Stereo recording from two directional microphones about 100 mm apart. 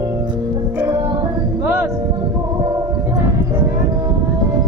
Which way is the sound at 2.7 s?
30° right (ahead or behind).